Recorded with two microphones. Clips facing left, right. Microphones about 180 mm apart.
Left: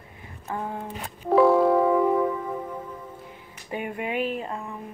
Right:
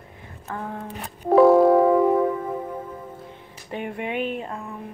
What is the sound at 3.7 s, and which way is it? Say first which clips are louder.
Speech: right 1 dB; 5° left (ahead or behind).